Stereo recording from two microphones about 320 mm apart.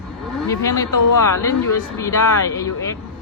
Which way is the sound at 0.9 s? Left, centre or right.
Left.